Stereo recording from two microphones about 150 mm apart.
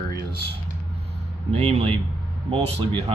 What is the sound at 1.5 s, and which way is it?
Speech, 40° right (ahead or behind).